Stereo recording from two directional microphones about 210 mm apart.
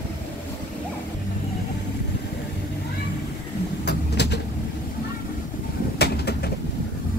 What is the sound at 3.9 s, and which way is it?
Vehicle, 55° left (ahead or behind).